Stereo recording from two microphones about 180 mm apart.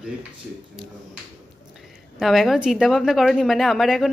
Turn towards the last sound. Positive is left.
turn(degrees=0)  # may be behind; listen again after turning